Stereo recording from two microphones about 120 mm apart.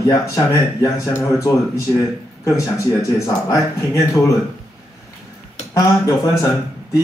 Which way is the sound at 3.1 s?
25° left (ahead or behind).